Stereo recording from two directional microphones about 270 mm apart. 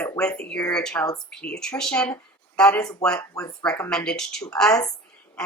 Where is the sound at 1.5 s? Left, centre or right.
Centre.